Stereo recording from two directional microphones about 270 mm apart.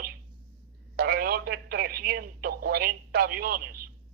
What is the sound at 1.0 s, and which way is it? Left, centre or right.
Speech, right.